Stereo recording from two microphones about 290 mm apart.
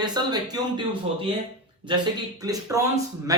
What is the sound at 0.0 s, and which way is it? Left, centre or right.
Speech, centre.